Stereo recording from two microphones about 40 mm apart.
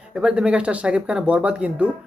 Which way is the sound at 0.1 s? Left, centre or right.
Right.